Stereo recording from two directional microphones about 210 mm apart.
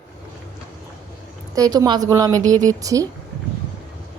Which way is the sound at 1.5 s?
15° right (ahead or behind).